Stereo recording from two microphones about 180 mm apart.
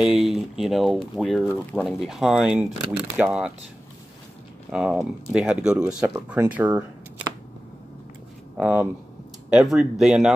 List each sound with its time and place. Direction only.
0.0 s speech: centre (ahead or behind)
1.5 s speech: 10° left (ahead or behind)
4.6 s speech: 5° right (ahead or behind)
8.5 s speech: 5° right (ahead or behind)